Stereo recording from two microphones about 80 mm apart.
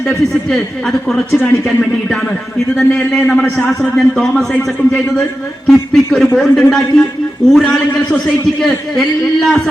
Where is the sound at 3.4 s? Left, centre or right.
Centre.